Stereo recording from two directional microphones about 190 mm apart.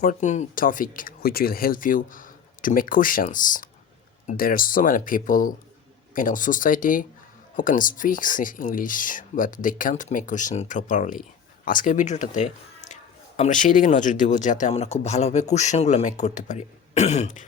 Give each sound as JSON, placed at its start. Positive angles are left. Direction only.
{"t": 0.0, "sound": "speech", "side_deg": 40}